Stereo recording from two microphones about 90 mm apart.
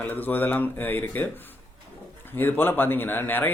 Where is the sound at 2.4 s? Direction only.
20° left (ahead or behind).